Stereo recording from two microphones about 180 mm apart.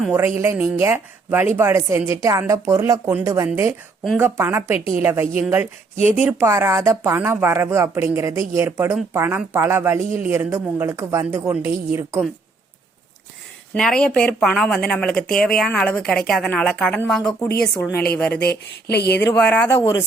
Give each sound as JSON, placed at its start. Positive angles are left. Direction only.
{"t": 0.0, "sound": "speech", "side_deg": -10}
{"t": 6.0, "sound": "speech", "side_deg": 40}
{"t": 6.2, "sound": "speech", "side_deg": -15}
{"t": 13.7, "sound": "speech", "side_deg": 5}
{"t": 18.3, "sound": "speech", "side_deg": 65}
{"t": 19.4, "sound": "speech", "side_deg": 10}